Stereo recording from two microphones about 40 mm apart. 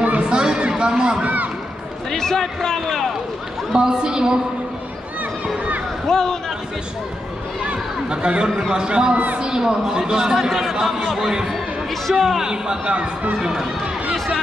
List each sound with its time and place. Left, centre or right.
0.2 s crowd: right
1.2 s a sound: right
2.0 s speech: centre
3.7 s a man's voice: centre
6.0 s speech: centre
7.6 s chatter: right
8.7 s a man's voice: right
9.4 s a man's voice: centre
12.8 s speech: right
13.4 s a man's voice: centre
14.1 s a sound: centre